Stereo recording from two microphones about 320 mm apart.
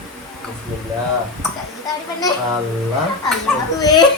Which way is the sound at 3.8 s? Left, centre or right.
Centre.